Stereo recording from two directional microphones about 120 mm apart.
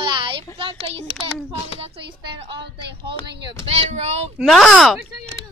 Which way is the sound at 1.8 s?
50° right (ahead or behind).